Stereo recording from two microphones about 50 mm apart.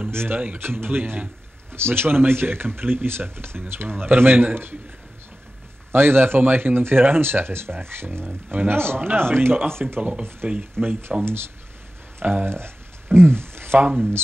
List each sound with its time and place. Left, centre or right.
0.1 s speech: right
5.9 s speech: right
8.5 s speech: right
8.7 s speech: right
9.9 s speech: right
12.2 s speech: right
12.5 s a sound: right